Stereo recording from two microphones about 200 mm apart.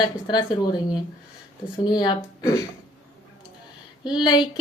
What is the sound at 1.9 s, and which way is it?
Female singing, 20° left (ahead or behind).